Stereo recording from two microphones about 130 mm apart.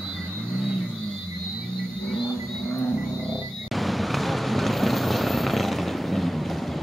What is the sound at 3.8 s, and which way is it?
Vehicle, centre (ahead or behind).